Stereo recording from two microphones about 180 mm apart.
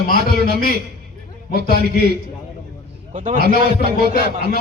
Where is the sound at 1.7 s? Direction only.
60° right (ahead or behind).